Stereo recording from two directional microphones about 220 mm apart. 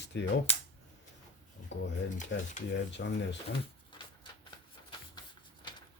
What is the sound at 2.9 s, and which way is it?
Speech, 55° left (ahead or behind).